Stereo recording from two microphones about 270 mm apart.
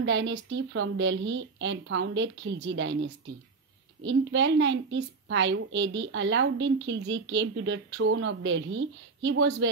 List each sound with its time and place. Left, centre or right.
0.0 s a woman's voice: right